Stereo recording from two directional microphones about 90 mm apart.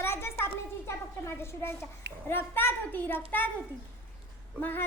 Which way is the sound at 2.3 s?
25° left (ahead or behind).